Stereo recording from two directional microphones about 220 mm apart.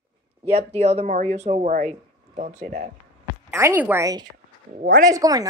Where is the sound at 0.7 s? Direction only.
30° right (ahead or behind).